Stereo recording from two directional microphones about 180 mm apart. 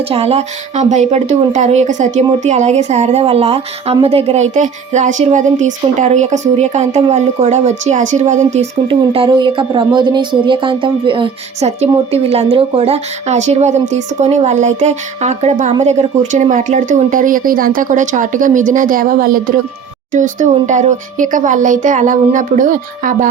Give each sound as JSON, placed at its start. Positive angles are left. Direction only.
{"t": 0.1, "sound": "a woman's voice", "side_deg": -35}
{"t": 8.9, "sound": "a woman's voice", "side_deg": -30}